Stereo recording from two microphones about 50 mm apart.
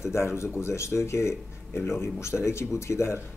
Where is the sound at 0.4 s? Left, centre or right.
Left.